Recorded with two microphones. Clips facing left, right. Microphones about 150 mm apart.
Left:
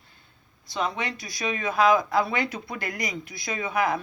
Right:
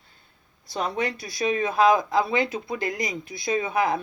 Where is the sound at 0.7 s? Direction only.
35° right (ahead or behind).